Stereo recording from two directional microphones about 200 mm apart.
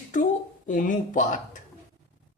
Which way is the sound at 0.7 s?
40° left (ahead or behind).